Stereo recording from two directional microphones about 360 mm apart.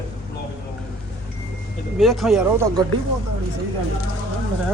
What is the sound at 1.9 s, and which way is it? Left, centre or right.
Speech, centre.